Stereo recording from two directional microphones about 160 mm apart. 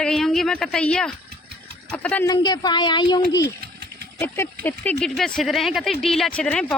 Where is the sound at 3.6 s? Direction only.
90° right.